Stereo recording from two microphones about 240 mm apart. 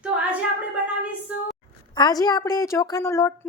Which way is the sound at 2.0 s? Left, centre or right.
Centre.